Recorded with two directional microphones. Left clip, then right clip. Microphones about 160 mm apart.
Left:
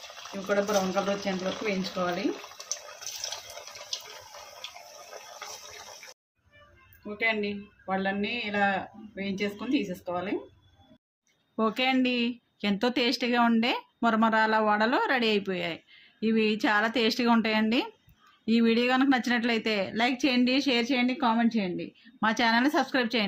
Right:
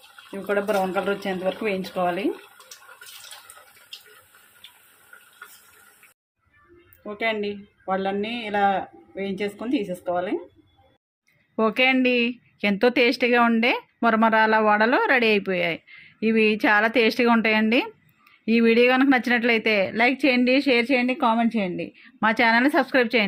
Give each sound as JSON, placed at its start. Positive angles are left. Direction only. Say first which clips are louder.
{"t": 1.2, "sound": "speech", "louder": "right 5 dB", "side_deg": -40}
{"t": 7.2, "sound": "speech", "louder": "right 3 dB", "side_deg": -35}
{"t": 11.5, "sound": "speech", "louder": "right 6 dB", "side_deg": -35}